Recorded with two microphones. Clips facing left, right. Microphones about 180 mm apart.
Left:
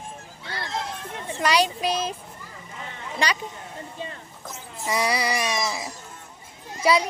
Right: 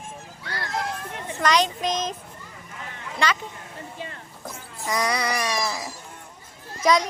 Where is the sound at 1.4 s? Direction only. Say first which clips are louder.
Even; 10° left (ahead or behind).